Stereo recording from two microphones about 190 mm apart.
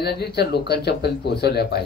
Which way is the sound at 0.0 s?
60° left (ahead or behind).